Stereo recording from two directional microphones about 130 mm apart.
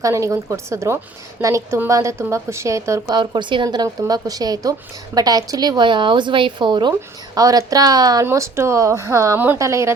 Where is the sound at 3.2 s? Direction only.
35° right (ahead or behind).